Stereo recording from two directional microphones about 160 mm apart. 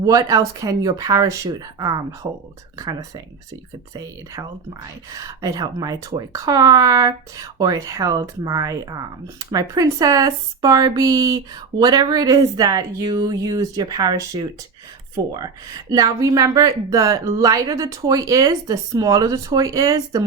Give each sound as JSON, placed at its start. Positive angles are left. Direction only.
{"t": 0.0, "sound": "speech", "side_deg": -20}
{"t": 5.1, "sound": "speech", "side_deg": -25}